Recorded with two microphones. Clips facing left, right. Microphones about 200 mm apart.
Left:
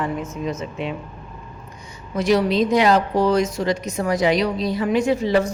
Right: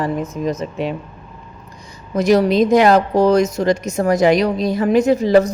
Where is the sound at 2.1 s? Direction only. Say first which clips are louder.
Right 4 dB; 40° right (ahead or behind).